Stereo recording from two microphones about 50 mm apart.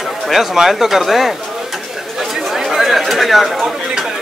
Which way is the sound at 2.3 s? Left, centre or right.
Centre.